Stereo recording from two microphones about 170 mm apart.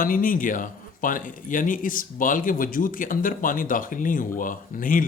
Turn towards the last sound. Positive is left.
turn(degrees=55)  # may be behind; listen again after turning